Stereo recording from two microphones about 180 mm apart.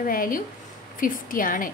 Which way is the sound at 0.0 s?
50° left (ahead or behind).